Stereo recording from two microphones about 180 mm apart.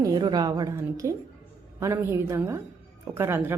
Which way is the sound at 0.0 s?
20° right (ahead or behind).